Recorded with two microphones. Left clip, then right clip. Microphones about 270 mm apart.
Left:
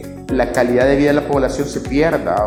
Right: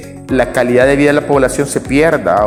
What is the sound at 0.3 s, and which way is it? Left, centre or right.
Speech, right.